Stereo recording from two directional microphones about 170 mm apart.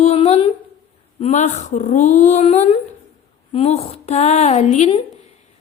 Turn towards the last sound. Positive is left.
turn(degrees=40)  # may be behind; listen again after turning